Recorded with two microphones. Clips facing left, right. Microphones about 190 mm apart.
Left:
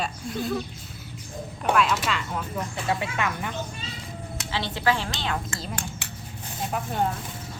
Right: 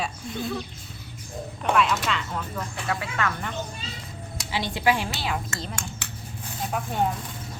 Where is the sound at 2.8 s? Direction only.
20° left (ahead or behind).